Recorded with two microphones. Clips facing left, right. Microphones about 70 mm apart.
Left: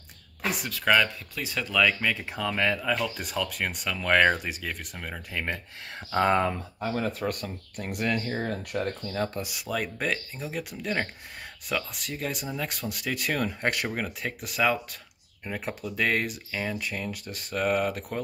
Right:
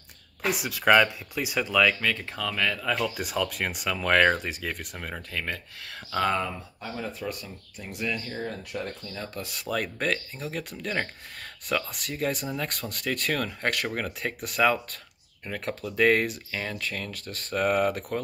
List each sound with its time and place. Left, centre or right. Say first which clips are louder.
0.4 s speech: right 2 dB; centre
2.0 s speech: even; centre
2.8 s speech: right 1 dB; centre
5.3 s speech: left 3 dB; centre
6.4 s speech: left 5 dB; left
9.4 s speech: right 1 dB; centre
13.8 s speech: right 1 dB; centre
16.7 s speech: left 1 dB; centre
17.5 s speech: right 2 dB; centre